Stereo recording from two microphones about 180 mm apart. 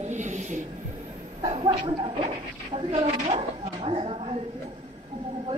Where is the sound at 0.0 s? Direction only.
40° right (ahead or behind).